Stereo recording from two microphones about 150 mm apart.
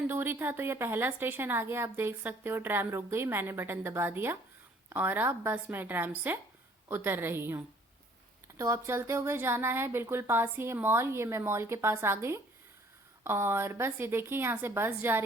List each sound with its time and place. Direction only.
0.1 s a woman's voice: 15° right (ahead or behind)